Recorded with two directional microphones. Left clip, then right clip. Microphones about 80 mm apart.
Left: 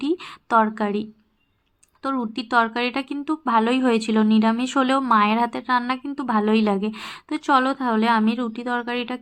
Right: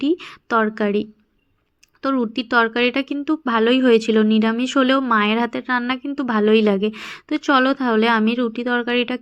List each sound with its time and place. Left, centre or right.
0.0 s a woman's voice: centre; by 9.1 s right